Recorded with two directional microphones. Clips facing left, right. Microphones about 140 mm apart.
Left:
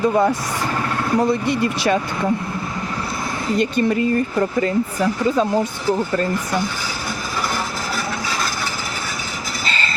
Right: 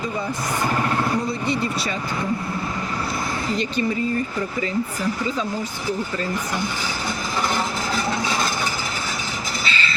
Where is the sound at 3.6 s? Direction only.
60° left (ahead or behind).